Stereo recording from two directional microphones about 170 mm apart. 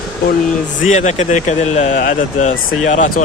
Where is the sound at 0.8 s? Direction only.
45° left (ahead or behind).